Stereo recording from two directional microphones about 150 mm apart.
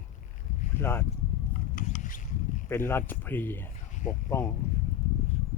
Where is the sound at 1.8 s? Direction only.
60° left (ahead or behind).